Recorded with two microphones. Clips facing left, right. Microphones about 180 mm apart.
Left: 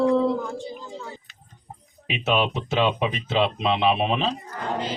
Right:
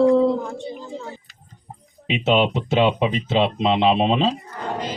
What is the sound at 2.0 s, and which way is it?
Speech, 25° right (ahead or behind).